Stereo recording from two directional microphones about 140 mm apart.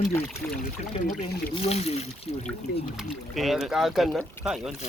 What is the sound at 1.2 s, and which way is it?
Speech, 45° left (ahead or behind).